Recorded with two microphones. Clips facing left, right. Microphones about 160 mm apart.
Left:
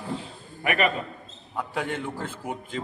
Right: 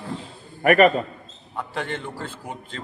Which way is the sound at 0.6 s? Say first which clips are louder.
Right 9 dB; 45° right (ahead or behind).